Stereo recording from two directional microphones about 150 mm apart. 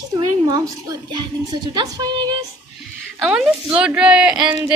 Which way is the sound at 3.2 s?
5° right (ahead or behind).